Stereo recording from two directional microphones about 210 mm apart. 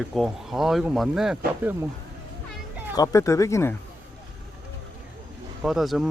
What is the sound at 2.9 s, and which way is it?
Speech, 15° left (ahead or behind).